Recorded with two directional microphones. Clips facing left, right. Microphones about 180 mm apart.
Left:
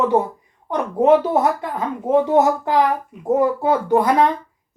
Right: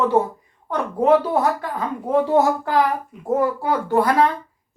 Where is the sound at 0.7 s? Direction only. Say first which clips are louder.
Left 2 dB; 20° left (ahead or behind).